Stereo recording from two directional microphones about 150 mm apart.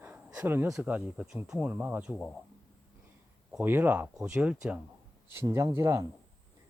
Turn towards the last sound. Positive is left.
turn(degrees=-20)  # may be behind; listen again after turning